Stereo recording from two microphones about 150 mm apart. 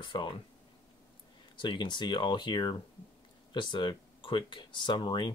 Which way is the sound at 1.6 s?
30° left (ahead or behind).